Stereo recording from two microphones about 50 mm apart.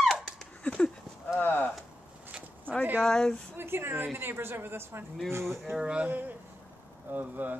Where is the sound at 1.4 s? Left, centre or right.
Left.